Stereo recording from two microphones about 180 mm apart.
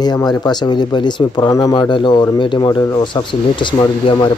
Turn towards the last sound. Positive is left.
turn(degrees=25)  # may be behind; listen again after turning